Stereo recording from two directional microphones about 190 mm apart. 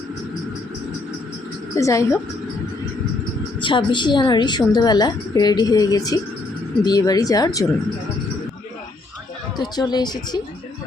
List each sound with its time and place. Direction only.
1.7 s a woman's voice: 15° left (ahead or behind)
3.6 s a woman's voice: 25° left (ahead or behind)
9.6 s a woman's voice: 20° left (ahead or behind)